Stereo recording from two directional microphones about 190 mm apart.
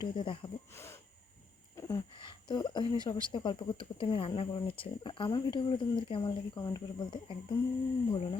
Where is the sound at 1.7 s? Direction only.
20° left (ahead or behind).